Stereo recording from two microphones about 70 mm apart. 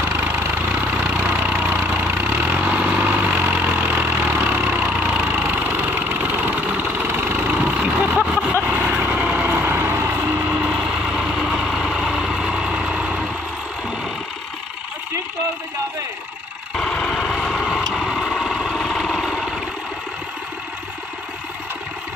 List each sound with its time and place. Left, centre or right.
0.0 s vehicle: right
4.5 s engine: right
7.3 s vehicle: centre
8.6 s vehicle: right
10.4 s vehicle: centre
16.7 s vehicle: centre